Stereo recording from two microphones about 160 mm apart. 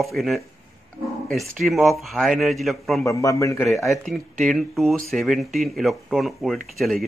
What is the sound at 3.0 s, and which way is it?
Speech, 20° left (ahead or behind).